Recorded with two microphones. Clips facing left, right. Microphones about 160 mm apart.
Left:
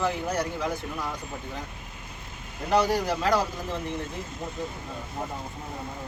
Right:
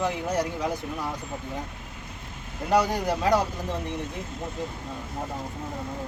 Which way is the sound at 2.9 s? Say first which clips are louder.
Right 1 dB; 20° right (ahead or behind).